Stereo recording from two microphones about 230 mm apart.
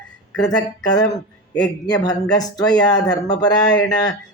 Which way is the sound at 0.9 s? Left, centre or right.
Centre.